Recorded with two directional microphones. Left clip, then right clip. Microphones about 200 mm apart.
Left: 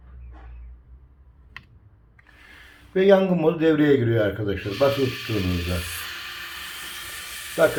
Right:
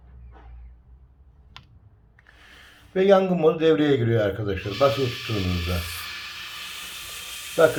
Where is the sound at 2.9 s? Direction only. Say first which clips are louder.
Left 1 dB; 5° left (ahead or behind).